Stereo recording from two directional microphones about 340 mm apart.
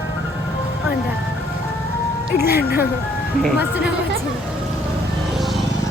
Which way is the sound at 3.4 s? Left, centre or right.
Centre.